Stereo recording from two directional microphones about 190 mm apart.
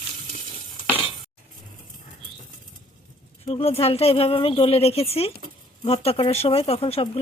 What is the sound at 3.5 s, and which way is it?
A woman's voice, 30° left (ahead or behind).